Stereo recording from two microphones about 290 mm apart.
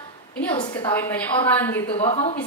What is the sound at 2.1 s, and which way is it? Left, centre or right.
Speech, left.